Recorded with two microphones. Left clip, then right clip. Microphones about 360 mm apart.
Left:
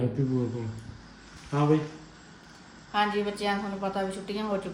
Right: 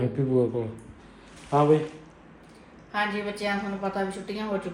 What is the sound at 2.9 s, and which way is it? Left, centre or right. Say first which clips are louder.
A woman's voice: left 1 dB; centre.